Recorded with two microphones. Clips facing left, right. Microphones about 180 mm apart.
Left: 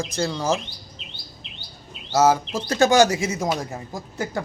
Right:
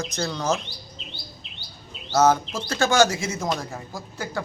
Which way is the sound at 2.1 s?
10° left (ahead or behind).